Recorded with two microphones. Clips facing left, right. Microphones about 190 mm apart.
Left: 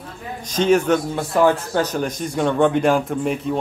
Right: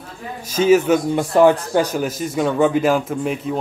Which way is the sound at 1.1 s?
15° right (ahead or behind).